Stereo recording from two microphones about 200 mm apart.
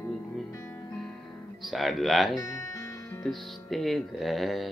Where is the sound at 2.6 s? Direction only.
15° left (ahead or behind).